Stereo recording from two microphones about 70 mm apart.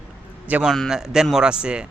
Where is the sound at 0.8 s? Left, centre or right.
Centre.